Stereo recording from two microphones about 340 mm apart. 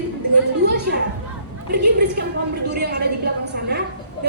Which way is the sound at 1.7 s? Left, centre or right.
Right.